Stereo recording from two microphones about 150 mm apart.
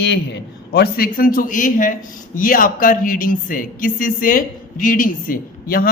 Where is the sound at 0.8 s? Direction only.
85° left.